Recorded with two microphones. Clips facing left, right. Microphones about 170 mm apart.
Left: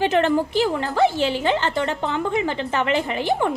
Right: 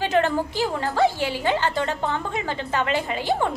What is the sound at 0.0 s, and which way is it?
A woman's voice, 20° left (ahead or behind).